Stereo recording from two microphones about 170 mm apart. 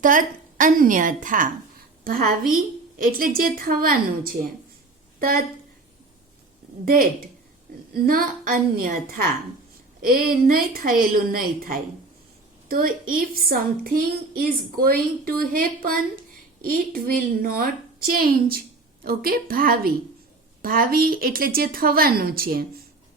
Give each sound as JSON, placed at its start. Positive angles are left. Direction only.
{"t": 0.0, "sound": "a woman's voice", "side_deg": -50}
{"t": 6.8, "sound": "a woman's voice", "side_deg": -60}